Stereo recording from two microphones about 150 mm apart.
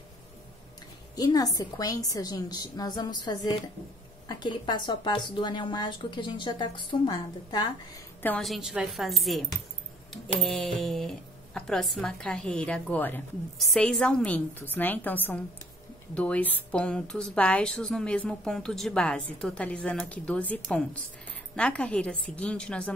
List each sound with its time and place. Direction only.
1.1 s a woman's voice: 25° left (ahead or behind)
8.4 s a woman's voice: centre (ahead or behind)